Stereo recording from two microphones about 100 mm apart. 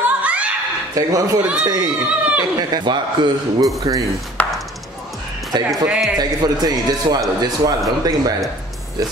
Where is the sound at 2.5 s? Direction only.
45° right (ahead or behind).